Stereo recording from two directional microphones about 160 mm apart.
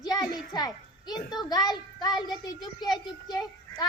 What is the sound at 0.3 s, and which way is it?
A child's voice, 25° left (ahead or behind).